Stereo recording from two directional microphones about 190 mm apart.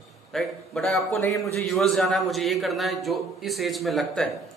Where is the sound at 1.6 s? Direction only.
Centre (ahead or behind).